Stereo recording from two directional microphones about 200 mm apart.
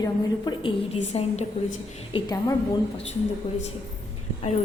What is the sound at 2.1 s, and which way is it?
Speech, 20° left (ahead or behind).